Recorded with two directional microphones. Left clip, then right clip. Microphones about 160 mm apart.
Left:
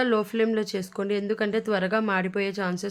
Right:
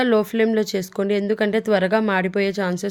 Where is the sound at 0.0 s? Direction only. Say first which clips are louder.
Right 5 dB; 30° right (ahead or behind).